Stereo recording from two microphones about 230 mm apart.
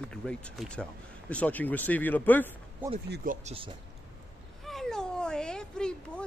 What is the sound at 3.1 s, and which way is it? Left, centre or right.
Speech, right.